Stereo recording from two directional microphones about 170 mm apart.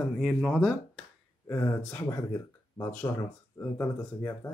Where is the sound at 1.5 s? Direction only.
15° left (ahead or behind).